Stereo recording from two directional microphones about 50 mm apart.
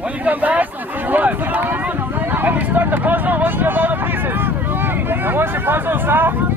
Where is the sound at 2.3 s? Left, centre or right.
Right.